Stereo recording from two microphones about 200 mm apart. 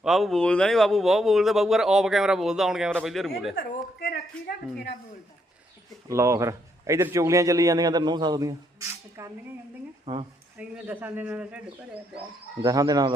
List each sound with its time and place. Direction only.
0.0 s speech: centre (ahead or behind)
3.5 s a sound: 55° left (ahead or behind)
6.1 s a man's voice: 15° right (ahead or behind)
10.6 s a man's voice: 5° right (ahead or behind)
12.6 s speech: 20° right (ahead or behind)